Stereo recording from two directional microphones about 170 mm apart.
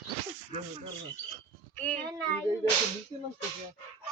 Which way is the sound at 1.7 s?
5° left (ahead or behind).